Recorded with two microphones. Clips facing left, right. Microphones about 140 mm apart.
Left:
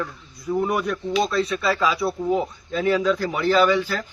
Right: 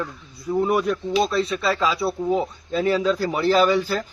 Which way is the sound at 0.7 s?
30° right (ahead or behind).